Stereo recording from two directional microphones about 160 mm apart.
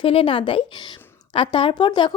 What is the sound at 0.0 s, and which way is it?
A woman's voice, 35° left (ahead or behind).